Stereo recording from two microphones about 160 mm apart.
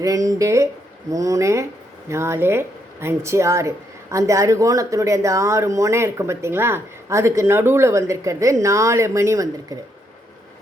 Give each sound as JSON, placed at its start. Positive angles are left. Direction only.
{"t": 0.0, "sound": "speech", "side_deg": -20}